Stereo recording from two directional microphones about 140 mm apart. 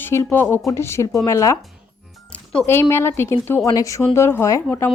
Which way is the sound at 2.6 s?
15° left (ahead or behind).